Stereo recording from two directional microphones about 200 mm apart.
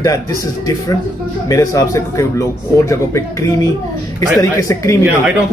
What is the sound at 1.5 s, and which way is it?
A man's voice, 15° left (ahead or behind).